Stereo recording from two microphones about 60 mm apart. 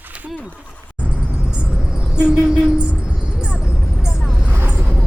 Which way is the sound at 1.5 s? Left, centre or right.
Centre.